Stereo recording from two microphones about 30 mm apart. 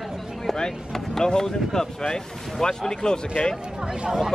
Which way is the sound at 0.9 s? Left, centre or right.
Centre.